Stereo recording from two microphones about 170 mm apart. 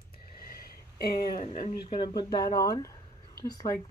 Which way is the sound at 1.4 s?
50° left (ahead or behind).